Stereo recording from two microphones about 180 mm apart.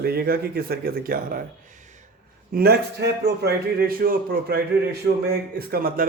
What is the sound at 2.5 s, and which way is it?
A man's voice, 60° right (ahead or behind).